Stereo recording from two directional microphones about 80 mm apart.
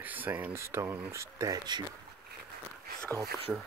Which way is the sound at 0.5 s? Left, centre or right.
Right.